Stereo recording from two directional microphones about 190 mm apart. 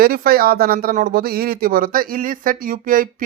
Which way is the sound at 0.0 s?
50° right (ahead or behind).